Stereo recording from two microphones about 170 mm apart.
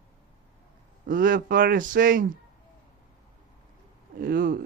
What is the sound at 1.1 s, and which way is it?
Speech, 55° right (ahead or behind).